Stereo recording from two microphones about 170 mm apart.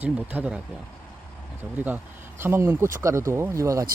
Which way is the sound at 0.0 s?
10° right (ahead or behind).